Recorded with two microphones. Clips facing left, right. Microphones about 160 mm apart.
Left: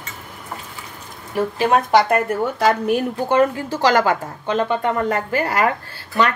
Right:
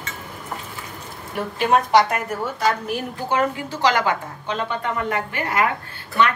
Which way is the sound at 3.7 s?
45° left (ahead or behind).